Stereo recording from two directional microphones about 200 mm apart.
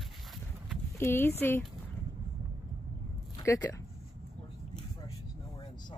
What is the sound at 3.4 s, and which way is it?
Speech, 15° left (ahead or behind).